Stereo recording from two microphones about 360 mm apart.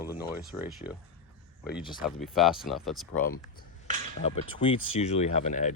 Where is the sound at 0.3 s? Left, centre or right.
Centre.